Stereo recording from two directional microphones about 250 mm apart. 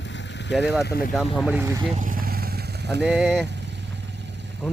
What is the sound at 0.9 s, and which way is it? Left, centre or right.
Speech, left.